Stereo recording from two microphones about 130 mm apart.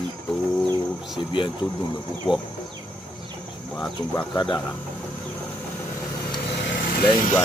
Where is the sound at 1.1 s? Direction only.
40° left (ahead or behind).